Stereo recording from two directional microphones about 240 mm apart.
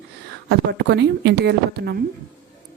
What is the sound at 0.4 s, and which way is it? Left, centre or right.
Speech, right.